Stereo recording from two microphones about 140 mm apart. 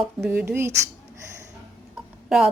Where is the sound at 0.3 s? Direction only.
15° right (ahead or behind).